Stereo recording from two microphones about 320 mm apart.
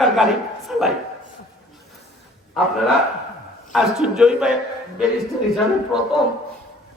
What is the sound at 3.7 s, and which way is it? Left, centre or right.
Speech, centre.